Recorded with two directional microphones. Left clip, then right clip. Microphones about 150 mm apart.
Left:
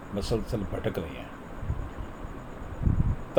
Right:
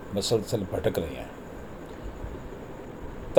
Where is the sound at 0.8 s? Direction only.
30° right (ahead or behind).